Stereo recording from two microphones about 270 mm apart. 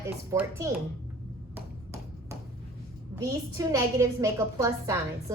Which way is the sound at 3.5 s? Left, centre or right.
Centre.